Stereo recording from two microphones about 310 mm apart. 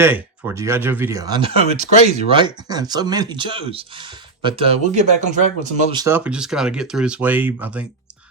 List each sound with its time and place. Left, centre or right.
0.0 s speech: centre